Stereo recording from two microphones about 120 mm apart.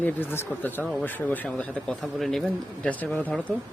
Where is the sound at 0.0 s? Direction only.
20° left (ahead or behind).